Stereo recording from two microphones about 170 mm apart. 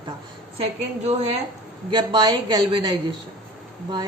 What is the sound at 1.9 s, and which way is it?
A woman's voice, 25° right (ahead or behind).